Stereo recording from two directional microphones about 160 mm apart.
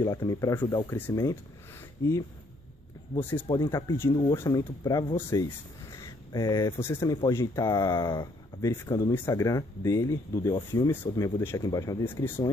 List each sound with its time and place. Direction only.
0.0 s speech: 20° left (ahead or behind)
3.2 s speech: 10° left (ahead or behind)